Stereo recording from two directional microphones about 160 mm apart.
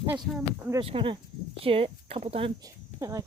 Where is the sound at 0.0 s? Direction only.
20° right (ahead or behind).